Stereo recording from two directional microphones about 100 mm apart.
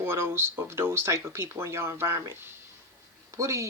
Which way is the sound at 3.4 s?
30° right (ahead or behind).